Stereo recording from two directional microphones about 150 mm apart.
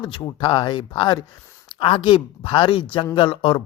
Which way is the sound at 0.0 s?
30° left (ahead or behind).